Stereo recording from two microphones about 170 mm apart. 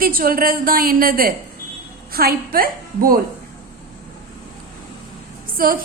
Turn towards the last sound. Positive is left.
turn(degrees=-55)  # may be behind; listen again after turning